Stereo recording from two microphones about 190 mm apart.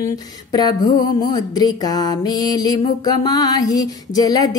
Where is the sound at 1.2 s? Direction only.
20° left (ahead or behind).